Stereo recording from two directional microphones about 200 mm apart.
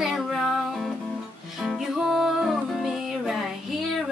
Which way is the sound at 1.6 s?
Centre (ahead or behind).